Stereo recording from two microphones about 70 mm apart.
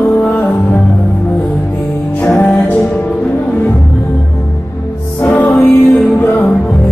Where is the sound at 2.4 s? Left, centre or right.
Centre.